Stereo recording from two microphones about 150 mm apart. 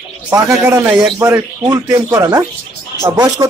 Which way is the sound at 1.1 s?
20° right (ahead or behind).